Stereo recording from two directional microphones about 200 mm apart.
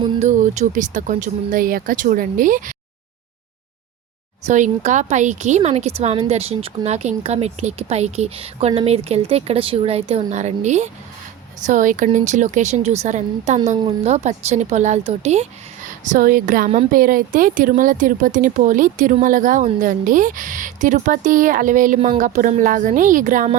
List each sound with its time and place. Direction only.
0.0 s a woman's voice: 35° right (ahead or behind)
4.4 s a woman's voice: 35° right (ahead or behind)